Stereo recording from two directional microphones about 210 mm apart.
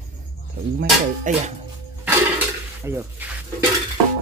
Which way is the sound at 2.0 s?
10° right (ahead or behind).